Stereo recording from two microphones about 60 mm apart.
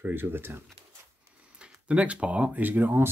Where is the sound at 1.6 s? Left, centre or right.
Centre.